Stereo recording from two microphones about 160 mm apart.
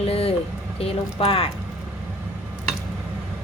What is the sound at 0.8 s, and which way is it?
Speech, 35° left (ahead or behind).